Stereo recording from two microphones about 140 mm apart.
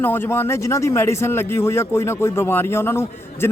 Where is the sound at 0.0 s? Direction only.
15° left (ahead or behind).